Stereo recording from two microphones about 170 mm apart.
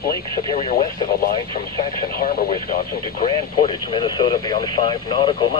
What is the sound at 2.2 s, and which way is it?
Speech, 55° left (ahead or behind).